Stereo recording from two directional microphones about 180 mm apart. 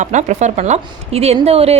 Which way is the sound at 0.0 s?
40° right (ahead or behind).